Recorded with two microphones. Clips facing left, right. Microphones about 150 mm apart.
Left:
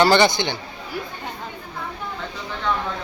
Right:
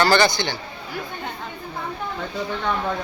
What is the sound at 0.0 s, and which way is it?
Speech, 20° left (ahead or behind).